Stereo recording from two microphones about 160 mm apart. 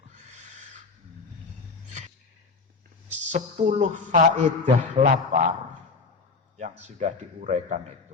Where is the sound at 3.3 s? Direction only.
50° right (ahead or behind).